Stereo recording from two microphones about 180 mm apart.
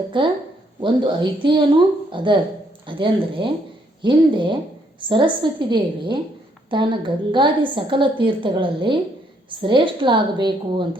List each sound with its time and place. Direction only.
0.1 s a woman's voice: 25° right (ahead or behind)